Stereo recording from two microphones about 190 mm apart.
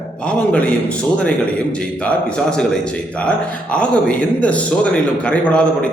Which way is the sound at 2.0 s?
5° left (ahead or behind).